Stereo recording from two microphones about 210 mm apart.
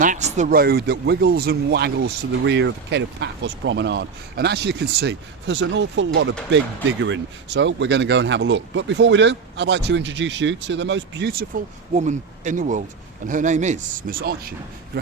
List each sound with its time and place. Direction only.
0.0 s speech: 35° right (ahead or behind); by 11.4 s 50° right (ahead or behind)
11.9 s speech: 35° right (ahead or behind)